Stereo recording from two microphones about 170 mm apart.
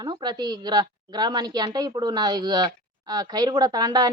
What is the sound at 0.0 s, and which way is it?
Speech, 25° right (ahead or behind).